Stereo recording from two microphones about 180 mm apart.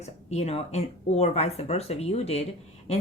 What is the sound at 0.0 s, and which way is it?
A woman's voice, 35° left (ahead or behind).